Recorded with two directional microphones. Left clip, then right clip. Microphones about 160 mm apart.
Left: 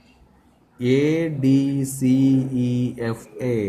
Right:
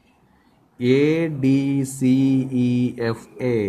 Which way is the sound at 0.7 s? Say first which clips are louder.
Right 2 dB; 45° right (ahead or behind).